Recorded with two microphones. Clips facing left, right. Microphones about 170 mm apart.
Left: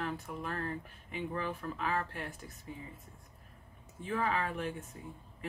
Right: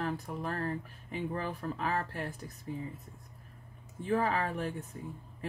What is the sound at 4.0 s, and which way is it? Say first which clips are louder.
Speech: right 3 dB; 35° right (ahead or behind).